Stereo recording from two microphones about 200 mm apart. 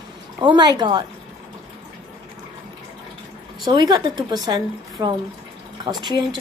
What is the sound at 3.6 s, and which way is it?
A woman's voice, 20° right (ahead or behind).